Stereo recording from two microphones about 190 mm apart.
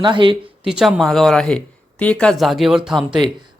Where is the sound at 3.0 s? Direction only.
25° right (ahead or behind).